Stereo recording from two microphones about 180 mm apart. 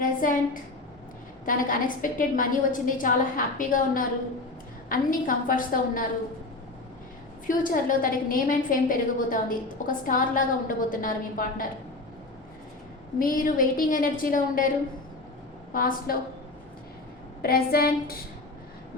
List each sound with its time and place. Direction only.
0.0 s a sound: 50° left (ahead or behind)
1.5 s a woman's voice: 50° left (ahead or behind)
7.4 s a woman's voice: 50° left (ahead or behind)
13.1 s a woman's voice: 50° left (ahead or behind)
15.7 s a woman's voice: 50° left (ahead or behind)
17.4 s a woman's voice: 55° left (ahead or behind)